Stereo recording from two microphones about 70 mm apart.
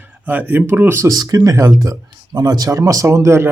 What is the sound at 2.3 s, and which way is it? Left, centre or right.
Speech, right.